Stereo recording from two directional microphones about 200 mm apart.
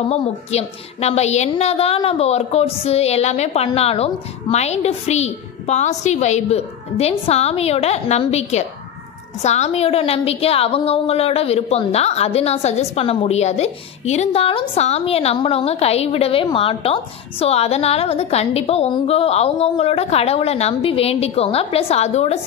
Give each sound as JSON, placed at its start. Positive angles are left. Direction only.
{"t": 0.1, "sound": "a woman's voice", "side_deg": 30}